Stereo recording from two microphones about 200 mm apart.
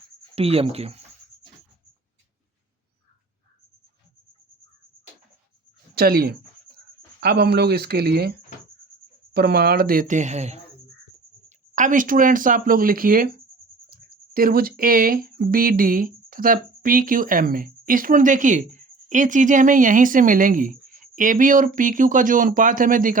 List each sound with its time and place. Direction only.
0.3 s speech: 30° right (ahead or behind)
5.9 s speech: 50° right (ahead or behind)